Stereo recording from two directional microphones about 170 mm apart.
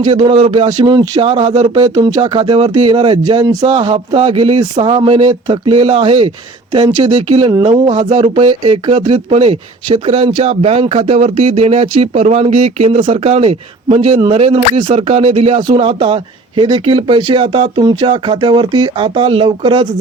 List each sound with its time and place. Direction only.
0.0 s speech: 30° right (ahead or behind)
6.7 s speech: 25° right (ahead or behind)
7.7 s speech: 45° right (ahead or behind); by 19.9 s 30° right (ahead or behind)